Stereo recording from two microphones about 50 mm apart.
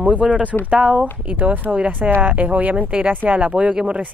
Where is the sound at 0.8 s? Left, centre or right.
Right.